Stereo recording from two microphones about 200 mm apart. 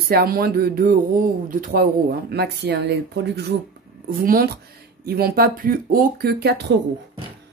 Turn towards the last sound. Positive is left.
turn(degrees=-55)  # may be behind; listen again after turning